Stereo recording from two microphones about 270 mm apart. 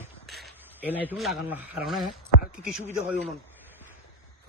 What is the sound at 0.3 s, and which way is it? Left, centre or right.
Speech, centre.